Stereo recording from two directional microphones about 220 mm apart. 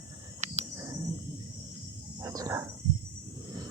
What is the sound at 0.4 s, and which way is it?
Cricket, 30° right (ahead or behind).